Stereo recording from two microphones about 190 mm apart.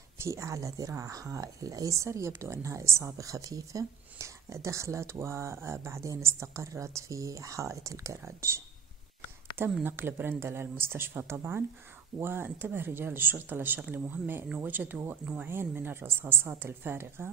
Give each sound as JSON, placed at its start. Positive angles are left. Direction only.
{"t": 0.2, "sound": "speech", "side_deg": -15}
{"t": 9.7, "sound": "speech", "side_deg": -5}